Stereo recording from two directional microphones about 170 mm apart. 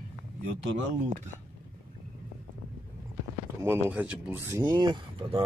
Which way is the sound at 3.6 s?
10° right (ahead or behind).